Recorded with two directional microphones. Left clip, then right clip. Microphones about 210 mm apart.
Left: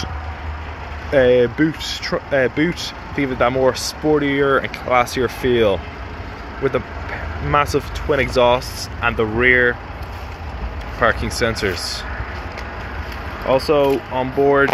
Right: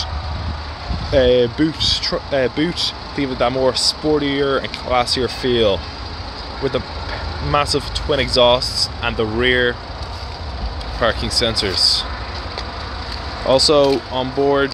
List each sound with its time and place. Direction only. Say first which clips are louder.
1.1 s speech: even; 5° right (ahead or behind)
7.5 s speech: even; centre (ahead or behind)
11.0 s speech: even; centre (ahead or behind)
13.5 s speech: right 2 dB; 20° right (ahead or behind)
14.1 s speech: left 1 dB; centre (ahead or behind)